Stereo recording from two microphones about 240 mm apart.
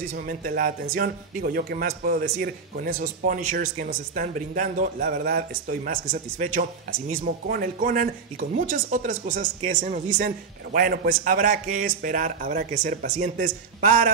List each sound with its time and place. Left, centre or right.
0.3 s speech: right